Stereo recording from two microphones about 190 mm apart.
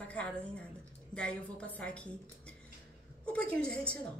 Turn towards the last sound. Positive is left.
turn(degrees=5)  # may be behind; listen again after turning